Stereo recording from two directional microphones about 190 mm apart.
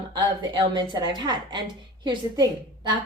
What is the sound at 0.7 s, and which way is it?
Speech, 20° right (ahead or behind).